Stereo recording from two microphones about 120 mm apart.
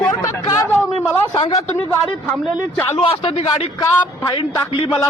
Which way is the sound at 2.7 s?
20° left (ahead or behind).